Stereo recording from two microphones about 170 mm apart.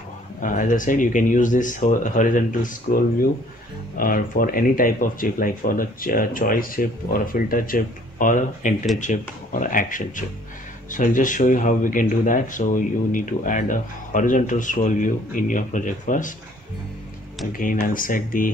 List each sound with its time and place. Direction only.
0.4 s speech: 50° left (ahead or behind)
17.5 s speech: 55° left (ahead or behind)